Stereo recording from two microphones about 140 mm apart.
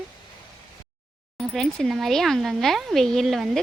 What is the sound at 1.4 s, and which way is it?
Speech, 5° left (ahead or behind).